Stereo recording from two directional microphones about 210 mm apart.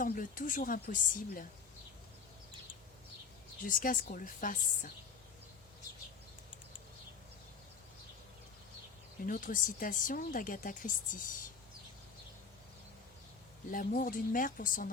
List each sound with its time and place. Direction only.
0.0 s speech: 40° left (ahead or behind)
3.6 s speech: 40° left (ahead or behind)
9.2 s speech: 40° left (ahead or behind)
13.7 s speech: 40° left (ahead or behind)